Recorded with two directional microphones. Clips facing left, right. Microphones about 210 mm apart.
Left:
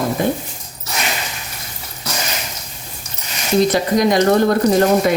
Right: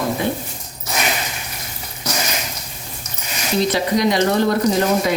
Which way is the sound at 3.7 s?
45° left (ahead or behind).